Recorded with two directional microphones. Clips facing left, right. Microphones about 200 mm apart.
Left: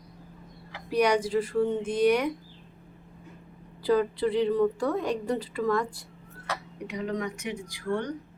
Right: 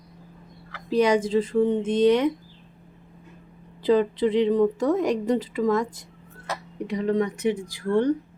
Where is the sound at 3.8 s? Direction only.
20° right (ahead or behind).